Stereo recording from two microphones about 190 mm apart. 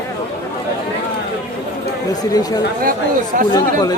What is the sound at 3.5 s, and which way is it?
Speech, 20° left (ahead or behind).